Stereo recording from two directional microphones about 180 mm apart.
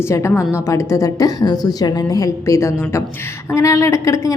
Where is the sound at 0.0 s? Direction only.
15° left (ahead or behind).